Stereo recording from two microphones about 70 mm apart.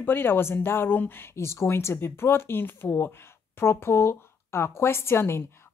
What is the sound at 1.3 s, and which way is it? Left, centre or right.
Speech, left.